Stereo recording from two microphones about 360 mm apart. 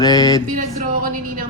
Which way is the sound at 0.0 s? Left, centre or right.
Centre.